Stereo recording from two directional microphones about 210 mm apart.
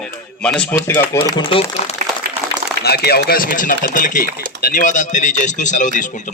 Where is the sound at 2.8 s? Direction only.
50° left (ahead or behind).